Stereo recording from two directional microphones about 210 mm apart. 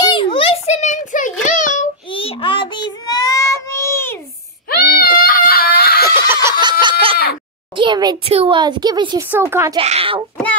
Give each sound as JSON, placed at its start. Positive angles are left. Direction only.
{"t": 0.0, "sound": "a sound", "side_deg": 20}
{"t": 2.0, "sound": "child singing", "side_deg": 25}
{"t": 4.6, "sound": "baby cry", "side_deg": 45}
{"t": 6.4, "sound": "a sound", "side_deg": -20}
{"t": 7.7, "sound": "a woman's voice", "side_deg": -20}
{"t": 9.8, "sound": "speech", "side_deg": -25}